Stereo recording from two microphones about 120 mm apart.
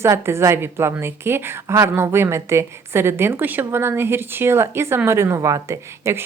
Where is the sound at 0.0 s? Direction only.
20° right (ahead or behind).